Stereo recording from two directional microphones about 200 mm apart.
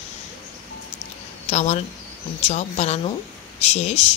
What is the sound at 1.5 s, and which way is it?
Speech, 35° left (ahead or behind).